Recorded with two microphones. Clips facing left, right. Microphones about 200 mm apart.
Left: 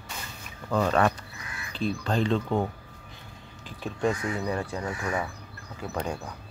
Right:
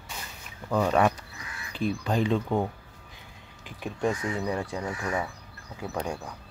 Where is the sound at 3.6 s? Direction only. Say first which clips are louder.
Left 1 dB; 15° right (ahead or behind).